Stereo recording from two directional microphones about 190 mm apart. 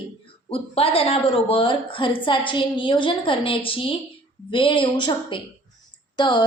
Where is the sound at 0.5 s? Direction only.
30° left (ahead or behind).